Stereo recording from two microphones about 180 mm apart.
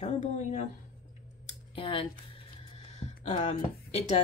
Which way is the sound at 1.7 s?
30° left (ahead or behind).